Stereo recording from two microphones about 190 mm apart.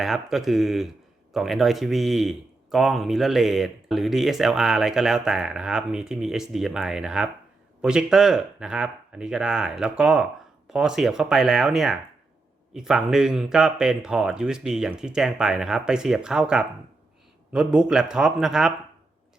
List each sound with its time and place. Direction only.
0.0 s a man's voice: centre (ahead or behind)